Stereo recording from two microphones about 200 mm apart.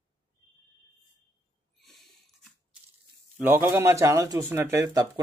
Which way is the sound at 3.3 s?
10° right (ahead or behind).